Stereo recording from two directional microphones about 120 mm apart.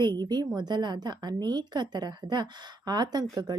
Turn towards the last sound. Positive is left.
turn(degrees=-35)  # may be behind; listen again after turning